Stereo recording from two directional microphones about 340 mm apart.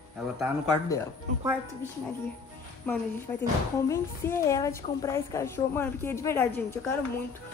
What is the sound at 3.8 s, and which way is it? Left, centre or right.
A woman's voice, centre.